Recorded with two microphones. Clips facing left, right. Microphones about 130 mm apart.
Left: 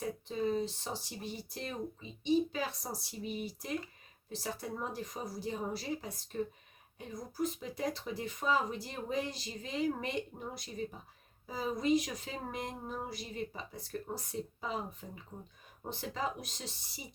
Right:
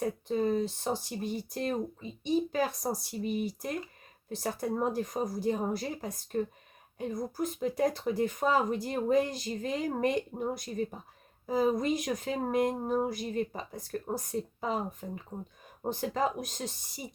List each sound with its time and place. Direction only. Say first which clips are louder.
0.0 s speech: right 5 dB; 50° right (ahead or behind)